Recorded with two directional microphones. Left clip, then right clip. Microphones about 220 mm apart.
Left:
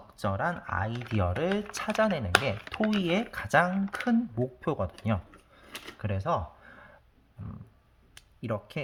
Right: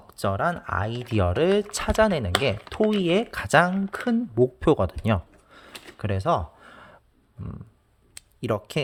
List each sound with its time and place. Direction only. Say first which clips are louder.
0.1 s speech: right 6 dB; 45° right (ahead or behind)
5.0 s a sound: right 7 dB; 45° right (ahead or behind)
8.4 s speech: right 8 dB; 50° right (ahead or behind)